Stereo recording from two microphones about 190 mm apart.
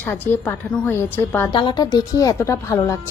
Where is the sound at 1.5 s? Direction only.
25° left (ahead or behind).